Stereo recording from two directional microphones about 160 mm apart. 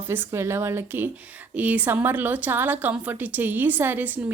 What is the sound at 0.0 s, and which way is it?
A woman's voice, 15° right (ahead or behind).